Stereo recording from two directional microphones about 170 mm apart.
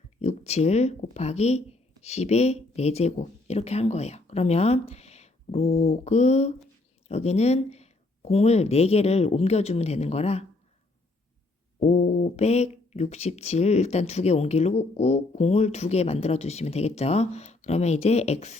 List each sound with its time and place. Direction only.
0.2 s speech: 40° left (ahead or behind)
11.8 s speech: 40° left (ahead or behind)